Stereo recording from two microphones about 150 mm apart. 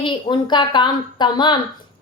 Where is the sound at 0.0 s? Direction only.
35° left (ahead or behind).